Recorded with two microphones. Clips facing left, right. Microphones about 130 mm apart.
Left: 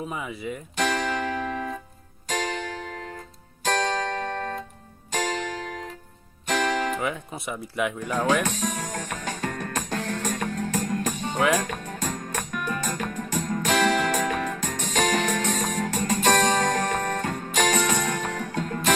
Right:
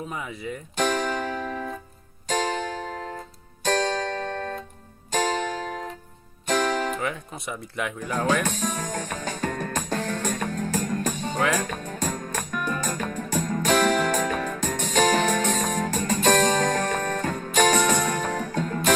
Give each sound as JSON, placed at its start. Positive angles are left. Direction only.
{"t": 0.1, "sound": "speech", "side_deg": 5}
{"t": 0.8, "sound": "music", "side_deg": -40}
{"t": 4.2, "sound": "music", "side_deg": 50}
{"t": 5.1, "sound": "music", "side_deg": -35}
{"t": 7.0, "sound": "speech", "side_deg": 5}
{"t": 8.4, "sound": "music", "side_deg": -40}
{"t": 11.3, "sound": "speech", "side_deg": 5}
{"t": 11.6, "sound": "music", "side_deg": -35}
{"t": 17.0, "sound": "music", "side_deg": 40}
{"t": 17.5, "sound": "music", "side_deg": -40}